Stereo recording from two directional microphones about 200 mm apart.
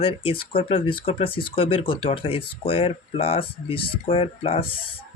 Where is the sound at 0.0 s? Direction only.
30° left (ahead or behind).